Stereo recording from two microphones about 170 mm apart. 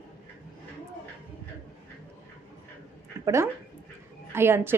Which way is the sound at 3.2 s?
15° right (ahead or behind).